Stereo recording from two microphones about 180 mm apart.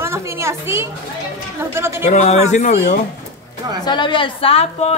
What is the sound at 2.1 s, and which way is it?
Speech, 40° left (ahead or behind).